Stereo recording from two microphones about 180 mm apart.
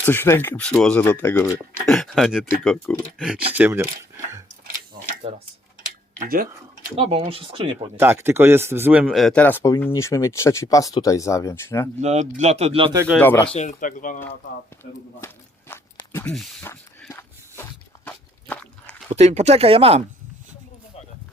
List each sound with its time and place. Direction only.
0.0 s speech: 10° left (ahead or behind)
3.2 s speech: 5° right (ahead or behind)
6.1 s speech: 55° right (ahead or behind)
6.9 s speech: 30° right (ahead or behind)
7.9 s speech: 15° right (ahead or behind)
9.0 s speech: centre (ahead or behind)
11.9 s speech: 40° right (ahead or behind)
13.1 s speech: 10° left (ahead or behind)
13.4 s speech: 35° left (ahead or behind)
16.2 s speech: 5° left (ahead or behind)
17.1 s a sound: 10° left (ahead or behind)
19.1 s speech: 35° right (ahead or behind)